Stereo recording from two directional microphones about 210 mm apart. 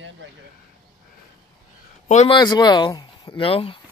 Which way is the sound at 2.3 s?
20° left (ahead or behind).